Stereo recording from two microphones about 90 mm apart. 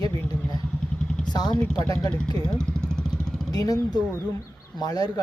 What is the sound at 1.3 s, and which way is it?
Speech, 50° left (ahead or behind).